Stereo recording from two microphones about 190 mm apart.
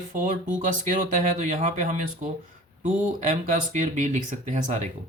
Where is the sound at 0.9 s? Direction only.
40° right (ahead or behind).